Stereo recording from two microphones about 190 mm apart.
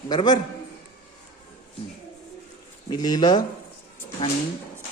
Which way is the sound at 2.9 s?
20° left (ahead or behind).